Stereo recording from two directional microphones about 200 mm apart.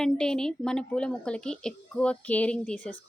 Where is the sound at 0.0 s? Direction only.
5° left (ahead or behind).